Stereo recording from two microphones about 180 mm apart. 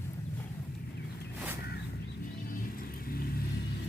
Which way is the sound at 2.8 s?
55° left (ahead or behind).